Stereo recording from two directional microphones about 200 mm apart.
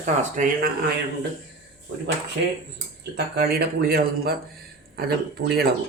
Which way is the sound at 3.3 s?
50° right (ahead or behind).